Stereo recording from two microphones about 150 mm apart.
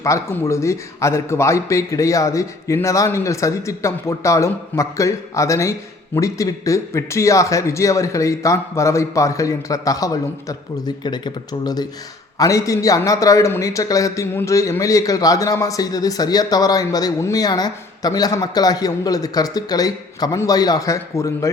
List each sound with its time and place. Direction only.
0.0 s a man's voice: 20° left (ahead or behind)